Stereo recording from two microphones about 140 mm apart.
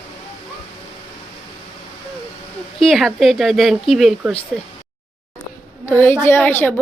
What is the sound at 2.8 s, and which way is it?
A woman's voice, centre (ahead or behind).